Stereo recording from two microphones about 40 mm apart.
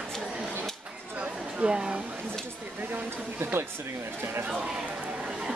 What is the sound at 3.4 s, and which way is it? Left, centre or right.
Speech, right.